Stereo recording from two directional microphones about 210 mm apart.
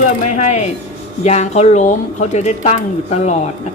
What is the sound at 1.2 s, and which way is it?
Speech, 30° left (ahead or behind).